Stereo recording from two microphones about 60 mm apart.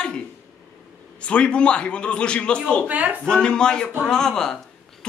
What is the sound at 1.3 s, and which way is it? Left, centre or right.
Speech, centre.